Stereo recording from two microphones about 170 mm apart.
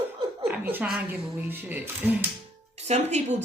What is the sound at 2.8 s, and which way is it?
Speech, 40° right (ahead or behind).